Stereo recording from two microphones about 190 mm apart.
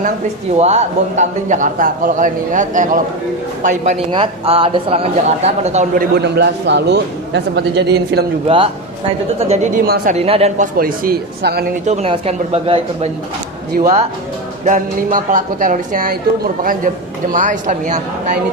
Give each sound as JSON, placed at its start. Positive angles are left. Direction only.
{"t": 0.5, "sound": "a man's voice", "side_deg": -35}
{"t": 4.1, "sound": "speech", "side_deg": -30}
{"t": 6.1, "sound": "a man's voice", "side_deg": -60}
{"t": 8.4, "sound": "a man's voice", "side_deg": -30}
{"t": 10.2, "sound": "a man's voice", "side_deg": -30}
{"t": 10.8, "sound": "speech", "side_deg": -50}
{"t": 11.9, "sound": "a man's voice", "side_deg": -30}
{"t": 17.3, "sound": "a man's voice", "side_deg": -45}